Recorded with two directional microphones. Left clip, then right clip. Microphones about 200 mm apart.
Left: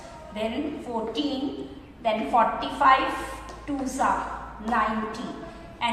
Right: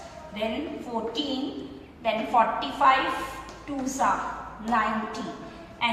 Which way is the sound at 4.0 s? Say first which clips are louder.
Even; 15° left (ahead or behind).